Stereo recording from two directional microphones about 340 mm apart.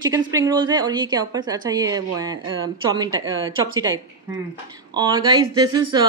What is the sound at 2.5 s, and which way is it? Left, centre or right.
Speech, right.